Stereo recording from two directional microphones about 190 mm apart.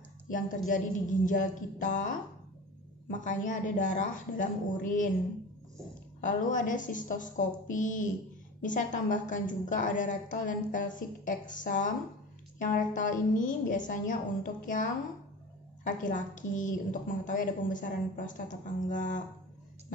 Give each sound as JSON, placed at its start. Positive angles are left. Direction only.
{"t": 0.7, "sound": "a woman's voice", "side_deg": 45}
{"t": 6.2, "sound": "a woman's voice", "side_deg": 45}